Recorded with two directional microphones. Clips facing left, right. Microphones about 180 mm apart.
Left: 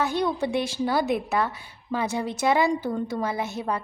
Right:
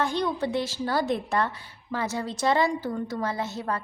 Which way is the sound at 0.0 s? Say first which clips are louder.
Left 2 dB; 10° left (ahead or behind).